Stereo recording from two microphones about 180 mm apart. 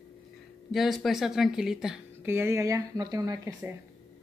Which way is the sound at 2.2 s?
15° right (ahead or behind).